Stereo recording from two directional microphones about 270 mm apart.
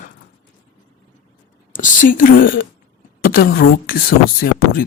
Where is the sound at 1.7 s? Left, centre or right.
Left.